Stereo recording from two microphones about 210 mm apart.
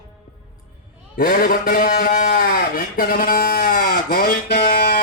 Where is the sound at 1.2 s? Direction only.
40° left (ahead or behind).